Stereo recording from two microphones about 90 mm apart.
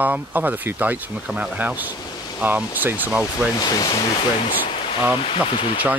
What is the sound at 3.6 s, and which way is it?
Speech, 50° left (ahead or behind).